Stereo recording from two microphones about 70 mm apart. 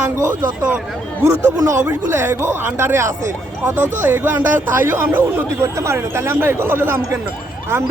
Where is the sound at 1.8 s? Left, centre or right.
Right.